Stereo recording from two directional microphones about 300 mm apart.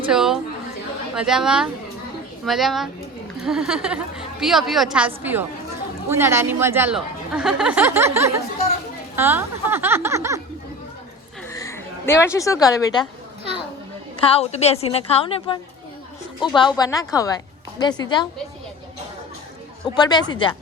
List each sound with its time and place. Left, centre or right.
0.1 s a sound: centre
1.1 s a woman's voice: centre
11.4 s speech: centre
14.2 s a woman's voice: centre
20.0 s a woman's voice: centre